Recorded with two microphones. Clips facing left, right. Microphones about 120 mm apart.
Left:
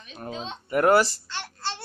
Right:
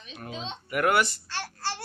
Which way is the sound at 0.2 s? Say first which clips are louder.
Left 3 dB; 40° left (ahead or behind).